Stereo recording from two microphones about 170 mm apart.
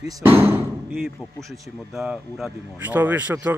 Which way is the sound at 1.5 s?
Centre (ahead or behind).